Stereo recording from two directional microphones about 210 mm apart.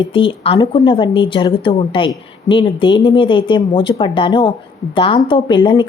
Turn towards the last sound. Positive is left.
turn(degrees=20)  # may be behind; listen again after turning